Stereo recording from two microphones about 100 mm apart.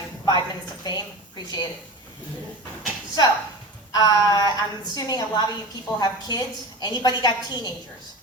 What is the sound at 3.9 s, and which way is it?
A woman's voice, 40° left (ahead or behind).